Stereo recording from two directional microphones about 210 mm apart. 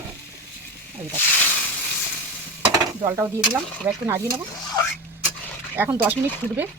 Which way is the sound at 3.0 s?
15° right (ahead or behind).